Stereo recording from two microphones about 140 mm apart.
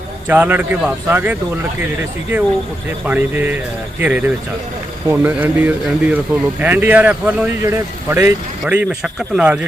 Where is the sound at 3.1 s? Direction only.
15° right (ahead or behind).